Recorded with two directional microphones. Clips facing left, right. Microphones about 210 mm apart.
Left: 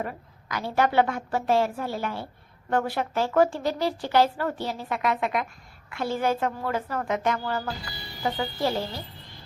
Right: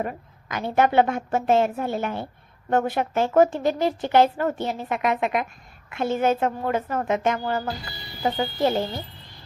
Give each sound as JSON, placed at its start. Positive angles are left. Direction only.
{"t": 0.0, "sound": "speech", "side_deg": -20}